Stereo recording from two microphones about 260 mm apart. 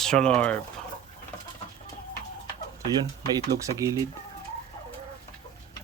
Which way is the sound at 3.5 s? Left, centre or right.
Centre.